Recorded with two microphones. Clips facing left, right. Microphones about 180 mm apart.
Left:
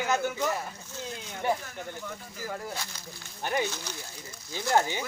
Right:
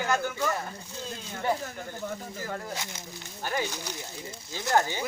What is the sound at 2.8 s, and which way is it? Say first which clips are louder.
Speech: right 2 dB; 20° right (ahead or behind).